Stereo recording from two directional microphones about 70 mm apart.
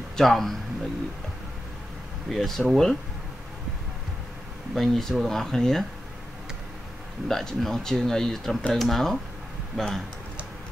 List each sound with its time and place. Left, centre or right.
0.2 s speech: centre
2.2 s speech: centre
4.7 s speech: centre
7.2 s speech: centre